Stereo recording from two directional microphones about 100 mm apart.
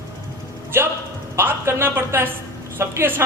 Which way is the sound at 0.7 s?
20° right (ahead or behind).